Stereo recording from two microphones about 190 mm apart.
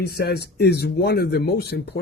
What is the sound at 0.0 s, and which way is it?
Speech, 55° left (ahead or behind).